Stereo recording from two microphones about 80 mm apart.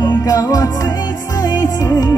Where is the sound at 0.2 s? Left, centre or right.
Left.